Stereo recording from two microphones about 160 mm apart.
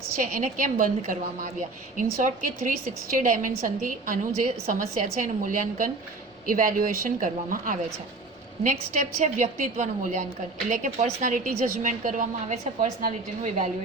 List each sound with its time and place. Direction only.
0.2 s a woman's voice: 55° right (ahead or behind)
8.6 s a woman's voice: 50° right (ahead or behind)